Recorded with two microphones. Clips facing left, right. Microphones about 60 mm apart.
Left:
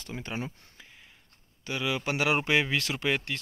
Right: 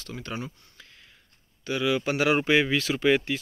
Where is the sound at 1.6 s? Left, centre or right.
Centre.